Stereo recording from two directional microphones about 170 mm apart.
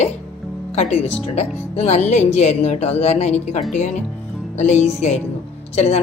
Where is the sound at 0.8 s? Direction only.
40° left (ahead or behind).